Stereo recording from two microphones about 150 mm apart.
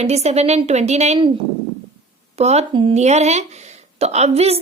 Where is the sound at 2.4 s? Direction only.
45° right (ahead or behind).